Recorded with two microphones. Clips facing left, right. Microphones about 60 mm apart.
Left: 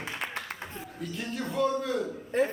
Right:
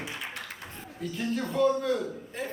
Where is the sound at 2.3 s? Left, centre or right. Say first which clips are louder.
Left 11 dB; left.